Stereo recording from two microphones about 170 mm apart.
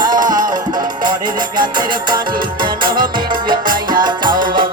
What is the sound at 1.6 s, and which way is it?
Music, 25° right (ahead or behind).